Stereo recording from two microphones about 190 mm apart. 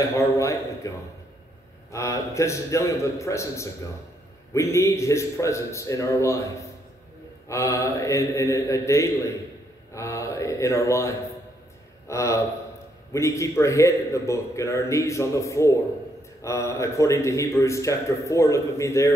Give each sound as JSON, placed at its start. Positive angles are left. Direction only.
{"t": 0.0, "sound": "a man's voice", "side_deg": 15}